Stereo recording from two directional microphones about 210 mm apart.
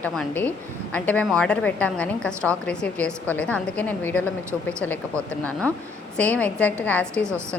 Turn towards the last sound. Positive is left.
turn(degrees=5)  # may be behind; listen again after turning